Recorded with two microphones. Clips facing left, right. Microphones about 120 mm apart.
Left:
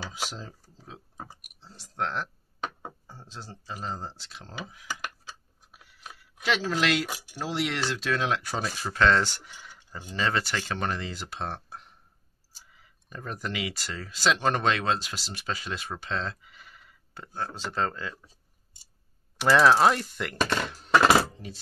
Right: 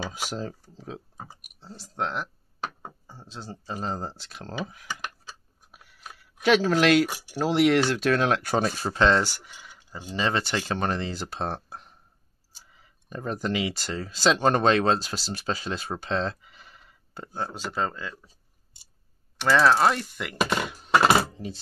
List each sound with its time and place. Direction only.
0.1 s speech: 55° right (ahead or behind)
0.7 s speech: 75° right (ahead or behind)
1.6 s speech: 30° right (ahead or behind)
2.0 s speech: 15° right (ahead or behind)
2.6 s a sound: 5° right (ahead or behind)
3.6 s speech: 40° right (ahead or behind)
6.4 s speech: 55° right (ahead or behind)
7.2 s speech: 70° right (ahead or behind); by 8.8 s 50° right (ahead or behind)
8.8 s speech: 25° right (ahead or behind)
9.2 s a sound: 5° right (ahead or behind)
9.9 s speech: 15° right (ahead or behind)
17.6 s speech: 5° right (ahead or behind)
19.3 s a sound: centre (ahead or behind)